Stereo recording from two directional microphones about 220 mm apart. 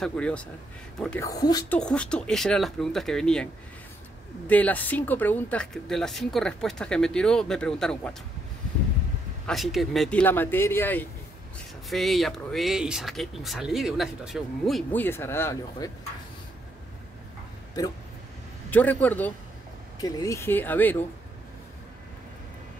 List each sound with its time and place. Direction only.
0.0 s speech: 5° left (ahead or behind)
1.2 s speech: 15° left (ahead or behind)
1.8 s speech: 5° left (ahead or behind)
4.5 s speech: 5° left (ahead or behind)
9.5 s speech: centre (ahead or behind)
17.8 s speech: 15° left (ahead or behind)